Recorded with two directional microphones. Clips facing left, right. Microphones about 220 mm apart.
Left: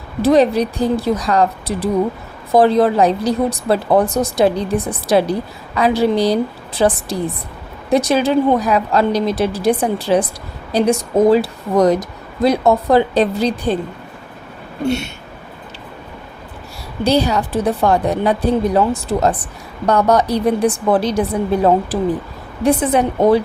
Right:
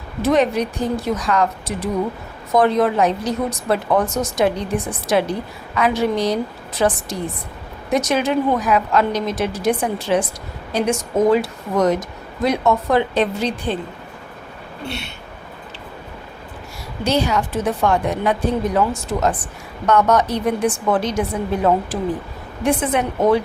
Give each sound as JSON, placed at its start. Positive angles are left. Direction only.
{"t": 0.2, "sound": "a woman's voice", "side_deg": 35}
{"t": 14.8, "sound": "a sound", "side_deg": 45}
{"t": 17.0, "sound": "a woman's voice", "side_deg": 35}